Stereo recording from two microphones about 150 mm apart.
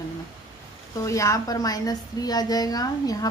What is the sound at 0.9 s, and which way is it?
A woman's voice, 20° left (ahead or behind).